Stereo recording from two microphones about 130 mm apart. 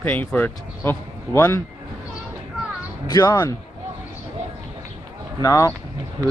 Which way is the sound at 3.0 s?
25° left (ahead or behind).